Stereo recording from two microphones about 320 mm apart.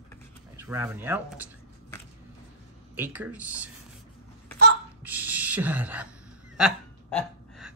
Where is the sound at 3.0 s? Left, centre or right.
Centre.